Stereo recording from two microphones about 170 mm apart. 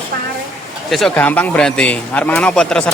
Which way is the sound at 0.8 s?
Centre (ahead or behind).